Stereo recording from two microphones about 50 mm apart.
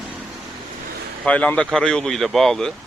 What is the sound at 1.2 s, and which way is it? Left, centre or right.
Speech, left.